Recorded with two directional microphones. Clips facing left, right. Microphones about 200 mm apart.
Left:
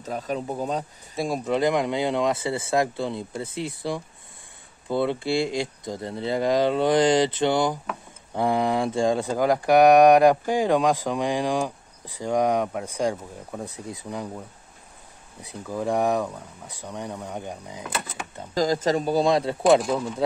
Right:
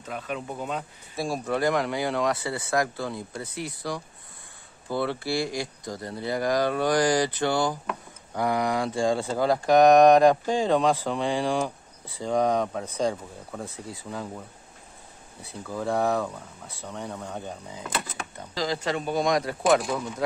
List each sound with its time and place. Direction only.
0.0 s speech: 35° left (ahead or behind)
1.1 s speech: 20° left (ahead or behind)
15.4 s speech: 15° left (ahead or behind)
18.5 s speech: 45° left (ahead or behind); by 19.5 s 30° left (ahead or behind)